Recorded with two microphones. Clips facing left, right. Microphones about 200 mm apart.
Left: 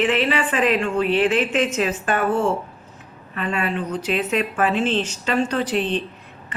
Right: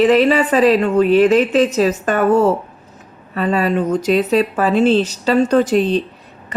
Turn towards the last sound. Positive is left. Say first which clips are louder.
# right 8 dB
turn(degrees=-40)  # may be behind; listen again after turning